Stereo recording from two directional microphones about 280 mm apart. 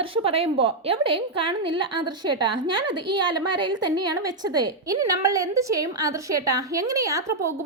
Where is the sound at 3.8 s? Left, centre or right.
Centre.